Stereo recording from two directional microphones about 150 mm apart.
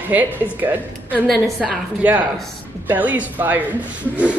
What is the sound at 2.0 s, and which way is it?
A woman's voice, 10° right (ahead or behind).